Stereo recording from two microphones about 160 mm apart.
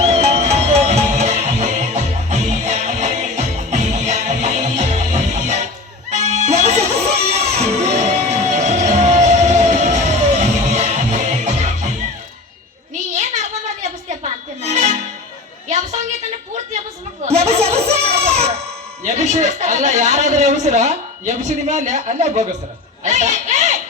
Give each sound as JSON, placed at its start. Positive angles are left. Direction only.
{"t": 0.1, "sound": "music", "side_deg": -45}
{"t": 14.6, "sound": "music", "side_deg": -45}
{"t": 17.2, "sound": "a sound", "side_deg": -40}